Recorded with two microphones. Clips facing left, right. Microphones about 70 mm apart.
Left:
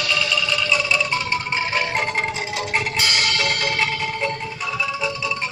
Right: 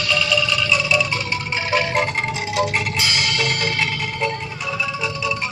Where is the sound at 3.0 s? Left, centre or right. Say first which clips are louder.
Even; left.